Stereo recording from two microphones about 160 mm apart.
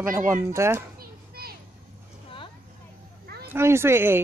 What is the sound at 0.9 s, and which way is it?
Children playing, 70° right (ahead or behind).